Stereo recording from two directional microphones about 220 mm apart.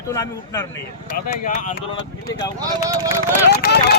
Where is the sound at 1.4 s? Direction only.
35° left (ahead or behind).